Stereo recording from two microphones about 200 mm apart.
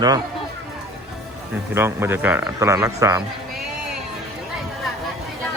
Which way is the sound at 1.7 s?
10° right (ahead or behind).